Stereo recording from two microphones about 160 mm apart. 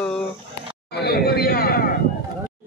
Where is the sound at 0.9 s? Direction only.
85° left; by 1.9 s 70° left (ahead or behind).